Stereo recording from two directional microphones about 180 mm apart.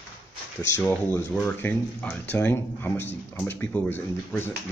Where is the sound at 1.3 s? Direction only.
5° left (ahead or behind).